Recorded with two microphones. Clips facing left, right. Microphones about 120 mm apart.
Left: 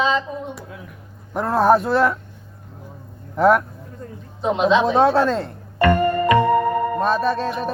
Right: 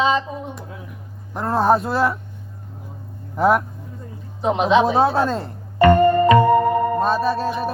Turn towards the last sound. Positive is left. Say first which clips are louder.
# right 1 dB
turn(degrees=-5)  # may be behind; listen again after turning